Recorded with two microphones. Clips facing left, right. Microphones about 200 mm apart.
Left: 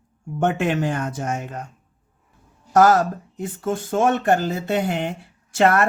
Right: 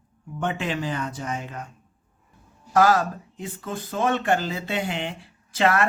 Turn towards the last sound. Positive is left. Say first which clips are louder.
# left 4 dB
turn(degrees=45)  # may be behind; listen again after turning